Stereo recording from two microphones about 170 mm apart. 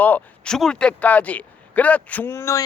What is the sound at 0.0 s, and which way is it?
Speech, 5° left (ahead or behind).